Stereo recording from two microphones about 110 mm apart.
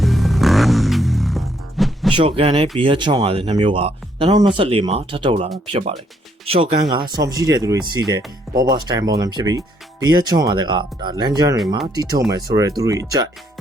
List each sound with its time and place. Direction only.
0.0 s music: centre (ahead or behind)
2.1 s speech: 55° right (ahead or behind)
4.3 s speech: 45° right (ahead or behind)
6.9 s speech: 35° right (ahead or behind)